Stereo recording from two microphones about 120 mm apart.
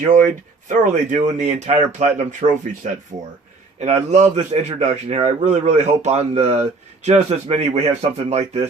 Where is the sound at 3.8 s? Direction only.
65° right (ahead or behind).